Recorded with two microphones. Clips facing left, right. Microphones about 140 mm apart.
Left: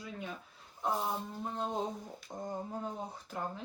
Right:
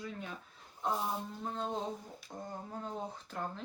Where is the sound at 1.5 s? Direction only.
15° left (ahead or behind).